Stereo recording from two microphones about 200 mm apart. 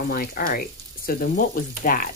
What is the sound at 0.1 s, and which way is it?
Speech, 45° left (ahead or behind).